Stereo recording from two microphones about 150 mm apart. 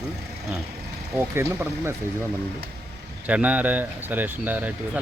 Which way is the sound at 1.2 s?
15° right (ahead or behind).